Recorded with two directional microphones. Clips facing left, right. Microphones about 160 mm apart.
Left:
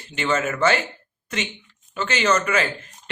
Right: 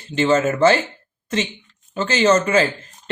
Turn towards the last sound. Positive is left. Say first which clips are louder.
# right 5 dB
turn(degrees=-30)  # may be behind; listen again after turning